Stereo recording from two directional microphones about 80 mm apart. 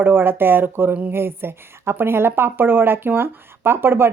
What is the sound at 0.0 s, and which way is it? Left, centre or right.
Speech, right.